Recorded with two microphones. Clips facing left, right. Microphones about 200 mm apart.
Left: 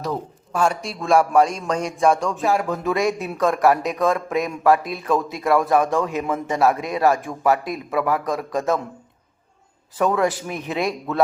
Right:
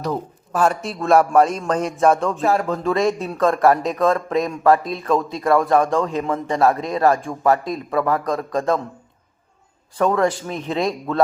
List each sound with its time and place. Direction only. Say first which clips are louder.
0.0 s a man's voice: right 2 dB; centre (ahead or behind)
2.7 s speech: right 2 dB; 15° left (ahead or behind)
3.0 s a man's voice: right 2 dB; centre (ahead or behind)
10.0 s a man's voice: right 2 dB; 5° left (ahead or behind)